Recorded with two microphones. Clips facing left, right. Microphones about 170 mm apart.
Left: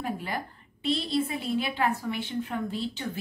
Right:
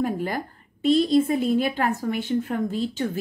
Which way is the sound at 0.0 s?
45° right (ahead or behind).